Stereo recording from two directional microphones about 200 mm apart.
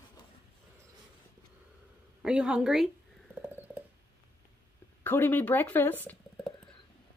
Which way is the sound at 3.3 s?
10° right (ahead or behind).